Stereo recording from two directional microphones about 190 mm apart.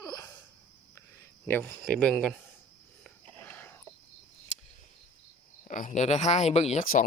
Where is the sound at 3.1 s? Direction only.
10° left (ahead or behind).